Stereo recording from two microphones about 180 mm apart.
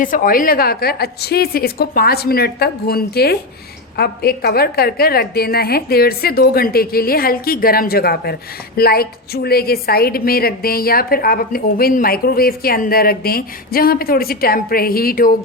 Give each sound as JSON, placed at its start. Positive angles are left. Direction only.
{"t": 0.0, "sound": "a woman's voice", "side_deg": 50}